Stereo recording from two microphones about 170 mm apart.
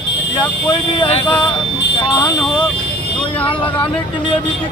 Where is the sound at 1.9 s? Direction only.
25° left (ahead or behind).